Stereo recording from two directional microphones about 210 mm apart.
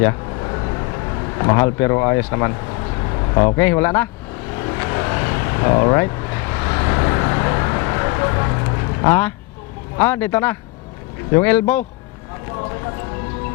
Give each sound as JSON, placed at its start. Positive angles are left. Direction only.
{"t": 0.0, "sound": "a sound", "side_deg": 20}
{"t": 3.0, "sound": "vehicle", "side_deg": 20}
{"t": 3.6, "sound": "speech", "side_deg": 10}
{"t": 4.5, "sound": "vehicle", "side_deg": 15}
{"t": 10.0, "sound": "speech", "side_deg": 10}